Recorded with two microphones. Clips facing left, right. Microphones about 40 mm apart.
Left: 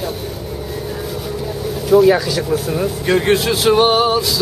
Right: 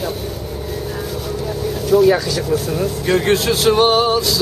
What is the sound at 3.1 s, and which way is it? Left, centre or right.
Speech, centre.